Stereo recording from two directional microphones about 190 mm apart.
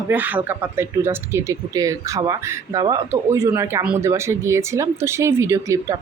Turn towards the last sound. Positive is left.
turn(degrees=-15)  # may be behind; listen again after turning